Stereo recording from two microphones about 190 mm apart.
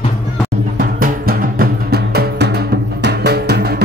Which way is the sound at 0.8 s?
50° right (ahead or behind).